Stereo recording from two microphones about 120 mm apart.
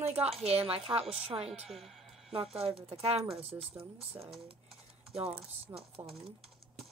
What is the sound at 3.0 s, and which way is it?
Speech, 55° right (ahead or behind).